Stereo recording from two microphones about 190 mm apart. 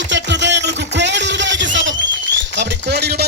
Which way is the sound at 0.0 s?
70° right (ahead or behind).